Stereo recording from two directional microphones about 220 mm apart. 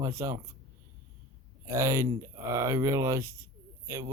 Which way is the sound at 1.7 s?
15° right (ahead or behind).